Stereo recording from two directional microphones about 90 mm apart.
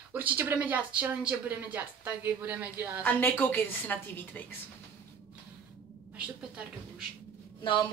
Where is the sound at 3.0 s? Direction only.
20° left (ahead or behind).